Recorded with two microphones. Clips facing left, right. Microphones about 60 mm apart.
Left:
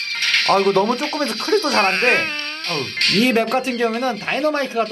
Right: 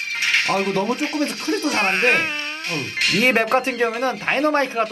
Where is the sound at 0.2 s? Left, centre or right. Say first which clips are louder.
Left 4 dB; centre.